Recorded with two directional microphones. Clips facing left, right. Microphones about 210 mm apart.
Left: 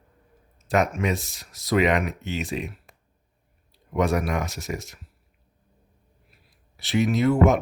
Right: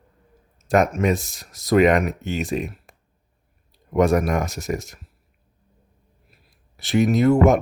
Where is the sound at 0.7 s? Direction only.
45° right (ahead or behind).